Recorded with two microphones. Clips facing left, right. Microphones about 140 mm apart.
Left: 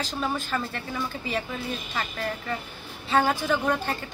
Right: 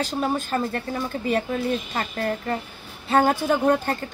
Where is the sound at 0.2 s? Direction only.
40° right (ahead or behind).